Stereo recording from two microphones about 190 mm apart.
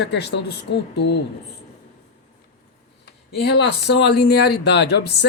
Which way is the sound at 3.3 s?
60° left (ahead or behind).